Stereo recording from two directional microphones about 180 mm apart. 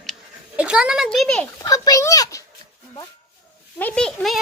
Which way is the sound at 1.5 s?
20° left (ahead or behind).